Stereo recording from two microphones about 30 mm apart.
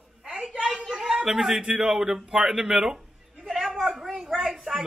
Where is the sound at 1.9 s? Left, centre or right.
Centre.